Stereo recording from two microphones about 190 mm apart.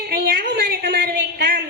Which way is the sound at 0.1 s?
50° right (ahead or behind).